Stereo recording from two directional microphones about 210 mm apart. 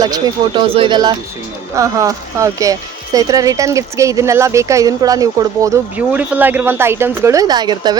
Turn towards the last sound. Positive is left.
turn(degrees=-20)  # may be behind; listen again after turning